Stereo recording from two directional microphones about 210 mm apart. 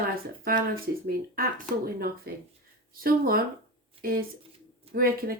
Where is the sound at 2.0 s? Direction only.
45° right (ahead or behind).